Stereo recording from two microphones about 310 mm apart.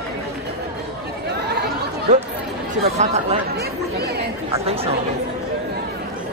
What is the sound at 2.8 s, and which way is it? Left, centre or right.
Speech, right.